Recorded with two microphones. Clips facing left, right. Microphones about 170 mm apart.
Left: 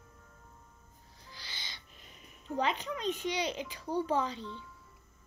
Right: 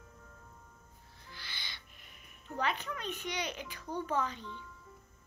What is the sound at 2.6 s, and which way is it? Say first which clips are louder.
A child's voice: left 3 dB; 15° left (ahead or behind).